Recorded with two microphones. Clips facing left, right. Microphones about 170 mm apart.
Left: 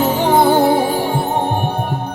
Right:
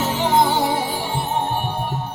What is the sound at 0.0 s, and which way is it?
Music, 50° left (ahead or behind).